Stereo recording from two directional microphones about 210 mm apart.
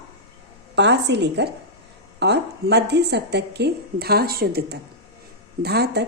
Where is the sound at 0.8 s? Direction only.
55° right (ahead or behind).